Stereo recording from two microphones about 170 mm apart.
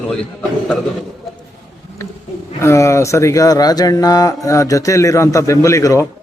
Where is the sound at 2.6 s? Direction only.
15° left (ahead or behind).